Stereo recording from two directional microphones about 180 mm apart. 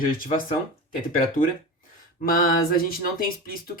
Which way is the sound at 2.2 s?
50° left (ahead or behind).